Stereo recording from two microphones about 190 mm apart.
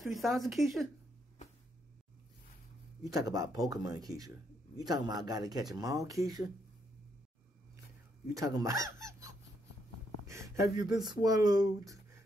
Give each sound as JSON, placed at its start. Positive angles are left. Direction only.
{"t": 0.0, "sound": "speech", "side_deg": 0}
{"t": 3.0, "sound": "speech", "side_deg": -20}
{"t": 8.4, "sound": "speech", "side_deg": -20}